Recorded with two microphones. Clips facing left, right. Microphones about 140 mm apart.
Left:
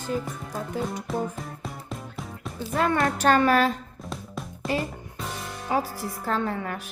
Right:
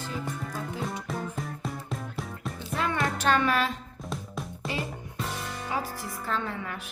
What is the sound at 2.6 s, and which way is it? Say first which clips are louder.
Music: left 6 dB; 45° left (ahead or behind).